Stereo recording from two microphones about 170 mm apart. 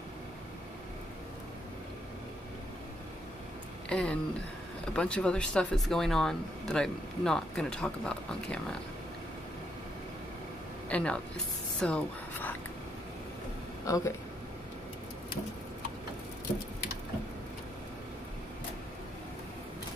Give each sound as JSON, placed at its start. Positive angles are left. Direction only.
{"t": 3.9, "sound": "speech", "side_deg": 5}
{"t": 10.9, "sound": "speech", "side_deg": 5}
{"t": 13.8, "sound": "speech", "side_deg": 20}